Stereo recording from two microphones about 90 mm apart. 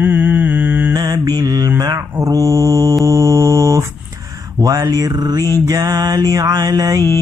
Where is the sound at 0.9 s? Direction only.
45° right (ahead or behind).